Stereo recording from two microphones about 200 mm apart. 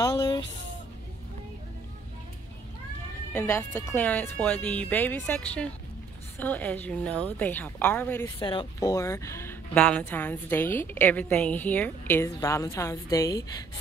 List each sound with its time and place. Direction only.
0.0 s a sound: 20° left (ahead or behind)
3.3 s speech: 10° left (ahead or behind)
8.4 s speech: 25° left (ahead or behind)